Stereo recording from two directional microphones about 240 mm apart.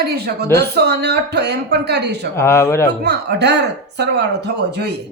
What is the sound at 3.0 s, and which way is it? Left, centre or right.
Speech, right.